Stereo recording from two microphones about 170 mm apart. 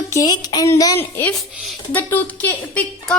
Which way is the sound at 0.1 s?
20° left (ahead or behind).